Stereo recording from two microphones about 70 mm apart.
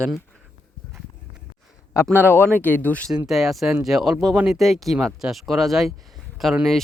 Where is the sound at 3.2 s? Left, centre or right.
Centre.